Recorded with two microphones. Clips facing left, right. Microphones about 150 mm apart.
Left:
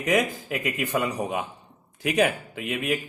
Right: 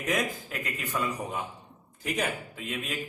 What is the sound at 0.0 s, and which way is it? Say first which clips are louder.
A man's voice: left 6 dB; 80° left.